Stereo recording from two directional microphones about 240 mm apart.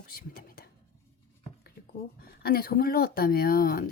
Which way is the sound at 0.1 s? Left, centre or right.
Left.